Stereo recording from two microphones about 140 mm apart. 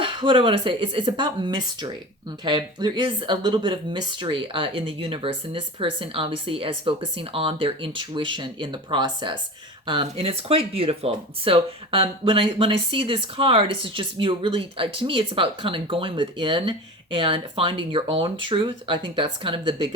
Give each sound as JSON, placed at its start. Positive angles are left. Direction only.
{"t": 0.0, "sound": "speech", "side_deg": -40}